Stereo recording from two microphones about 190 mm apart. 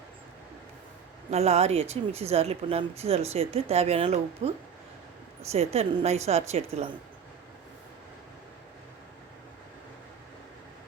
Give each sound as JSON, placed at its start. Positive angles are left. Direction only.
{"t": 1.3, "sound": "speech", "side_deg": -35}